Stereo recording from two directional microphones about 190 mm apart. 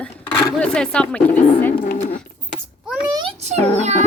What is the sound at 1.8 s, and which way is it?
Speech, 45° left (ahead or behind).